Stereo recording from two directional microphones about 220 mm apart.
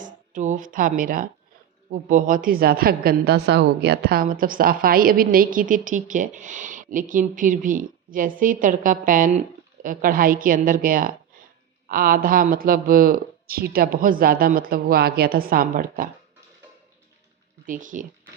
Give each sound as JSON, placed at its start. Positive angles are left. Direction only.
{"t": 0.0, "sound": "a woman's voice", "side_deg": -35}
{"t": 17.7, "sound": "a woman's voice", "side_deg": -35}